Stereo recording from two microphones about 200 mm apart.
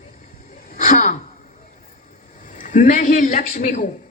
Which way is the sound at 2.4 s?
40° left (ahead or behind).